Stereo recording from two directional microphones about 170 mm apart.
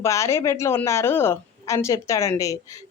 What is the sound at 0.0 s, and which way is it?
Speech, 15° left (ahead or behind).